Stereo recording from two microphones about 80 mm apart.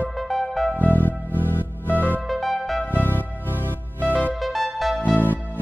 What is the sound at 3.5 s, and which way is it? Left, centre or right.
Music, right.